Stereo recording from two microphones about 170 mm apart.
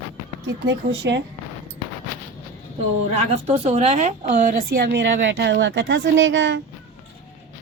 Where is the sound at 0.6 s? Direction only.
90° right.